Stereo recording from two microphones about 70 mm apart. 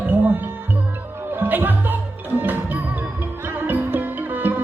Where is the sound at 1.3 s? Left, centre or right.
Right.